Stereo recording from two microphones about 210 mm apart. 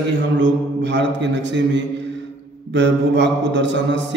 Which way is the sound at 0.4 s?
60° right (ahead or behind).